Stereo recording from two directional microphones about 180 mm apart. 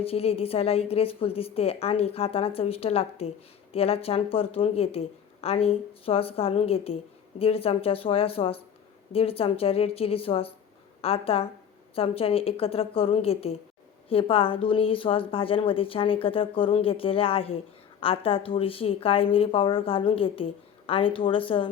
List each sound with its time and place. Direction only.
0.0 s a woman's voice: 35° left (ahead or behind)